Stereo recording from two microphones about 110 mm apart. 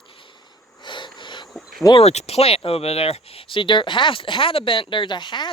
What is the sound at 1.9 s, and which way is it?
Speech, 80° left.